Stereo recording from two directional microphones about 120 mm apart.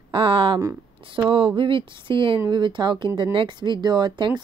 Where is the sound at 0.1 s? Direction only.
45° right (ahead or behind).